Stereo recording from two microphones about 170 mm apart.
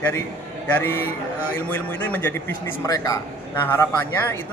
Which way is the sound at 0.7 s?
15° left (ahead or behind).